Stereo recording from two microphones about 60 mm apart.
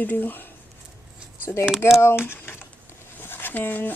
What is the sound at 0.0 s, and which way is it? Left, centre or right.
Speech, left.